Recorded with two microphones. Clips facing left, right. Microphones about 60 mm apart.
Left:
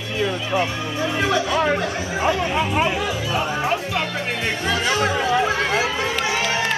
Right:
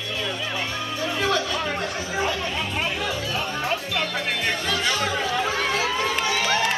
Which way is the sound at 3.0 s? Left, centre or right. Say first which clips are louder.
Left 4 dB; centre.